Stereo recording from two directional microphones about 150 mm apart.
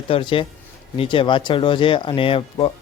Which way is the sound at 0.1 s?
35° left (ahead or behind).